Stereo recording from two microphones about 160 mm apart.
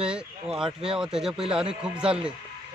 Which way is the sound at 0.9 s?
5° right (ahead or behind).